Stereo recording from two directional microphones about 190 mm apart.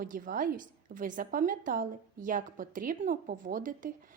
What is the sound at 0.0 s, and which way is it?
A woman's voice, 45° right (ahead or behind).